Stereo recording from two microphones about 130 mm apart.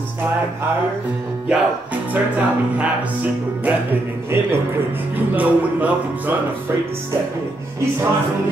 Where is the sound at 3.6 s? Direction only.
15° right (ahead or behind).